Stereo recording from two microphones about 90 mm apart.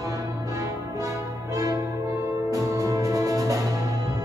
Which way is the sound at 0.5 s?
40° right (ahead or behind).